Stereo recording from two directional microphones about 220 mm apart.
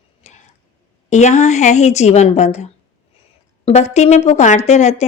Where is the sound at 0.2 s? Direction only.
30° left (ahead or behind).